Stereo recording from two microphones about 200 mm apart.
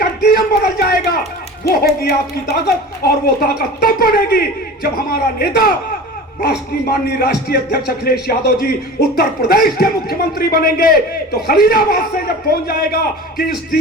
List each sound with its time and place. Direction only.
0.0 s a sound: 50° left (ahead or behind)
2.0 s speech: 50° left (ahead or behind)
6.8 s speech: 50° left (ahead or behind)